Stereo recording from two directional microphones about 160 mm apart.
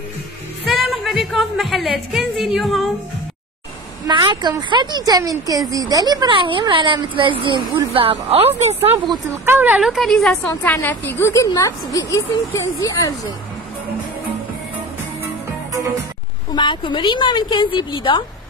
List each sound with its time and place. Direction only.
0.7 s a woman's voice: centre (ahead or behind)
4.1 s a woman's voice: 30° right (ahead or behind)
8.9 s speech: 25° right (ahead or behind)
9.5 s a woman's voice: 10° right (ahead or behind); by 13.3 s 20° left (ahead or behind)
16.5 s a woman's voice: 30° left (ahead or behind)